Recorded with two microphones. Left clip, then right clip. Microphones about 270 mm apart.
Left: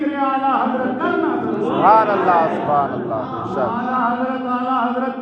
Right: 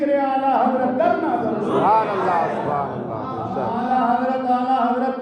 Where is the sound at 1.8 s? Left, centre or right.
Right.